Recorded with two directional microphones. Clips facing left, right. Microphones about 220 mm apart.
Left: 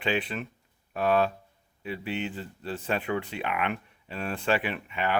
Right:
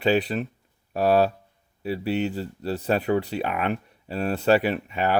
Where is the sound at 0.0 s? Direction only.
40° right (ahead or behind).